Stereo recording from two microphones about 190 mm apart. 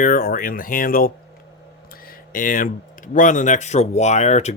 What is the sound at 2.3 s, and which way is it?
Speech, 45° left (ahead or behind).